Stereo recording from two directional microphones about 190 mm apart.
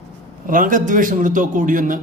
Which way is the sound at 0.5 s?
45° right (ahead or behind).